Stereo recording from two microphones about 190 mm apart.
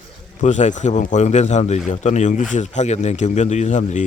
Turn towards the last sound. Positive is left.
turn(degrees=40)  # may be behind; listen again after turning